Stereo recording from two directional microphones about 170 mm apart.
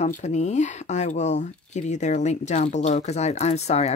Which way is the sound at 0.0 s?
45° left (ahead or behind).